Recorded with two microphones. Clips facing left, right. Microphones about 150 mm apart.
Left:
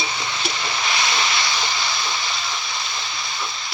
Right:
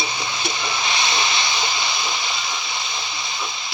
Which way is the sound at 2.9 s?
15° right (ahead or behind).